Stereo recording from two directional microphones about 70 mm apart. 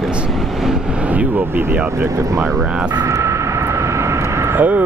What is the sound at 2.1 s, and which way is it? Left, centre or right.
Speech, right.